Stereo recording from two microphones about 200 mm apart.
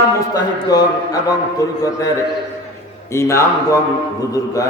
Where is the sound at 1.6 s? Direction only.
15° left (ahead or behind).